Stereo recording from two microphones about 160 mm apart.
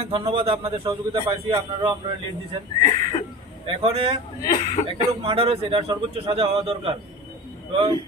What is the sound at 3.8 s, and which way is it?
Speech, 35° right (ahead or behind).